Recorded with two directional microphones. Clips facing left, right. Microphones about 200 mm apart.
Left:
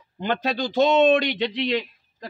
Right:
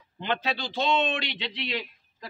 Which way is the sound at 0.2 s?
45° left (ahead or behind).